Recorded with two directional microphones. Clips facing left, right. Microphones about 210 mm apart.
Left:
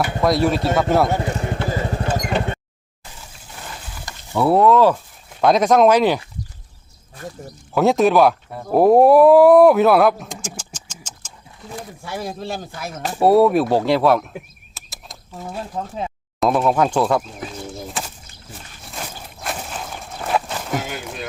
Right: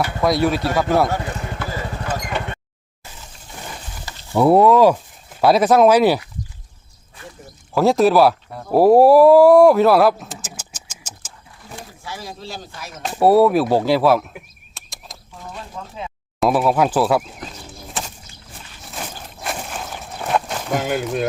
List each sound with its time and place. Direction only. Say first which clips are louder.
0.2 s speech: even; centre (ahead or behind)
1.0 s speech: left 2 dB; 20° left (ahead or behind)
1.4 s vehicle: left 4 dB; 30° left (ahead or behind)
4.4 s speech: right 2 dB; 15° right (ahead or behind)
7.7 s speech: right 1 dB; centre (ahead or behind)
12.0 s speech: left 6 dB; 55° left (ahead or behind)
13.0 s speech: even; centre (ahead or behind)
14.8 s a sound: even; centre (ahead or behind)
16.4 s speech: right 1 dB; 5° right (ahead or behind)
18.9 s a sound: right 1 dB; centre (ahead or behind)
20.7 s speech: right 8 dB; 50° right (ahead or behind)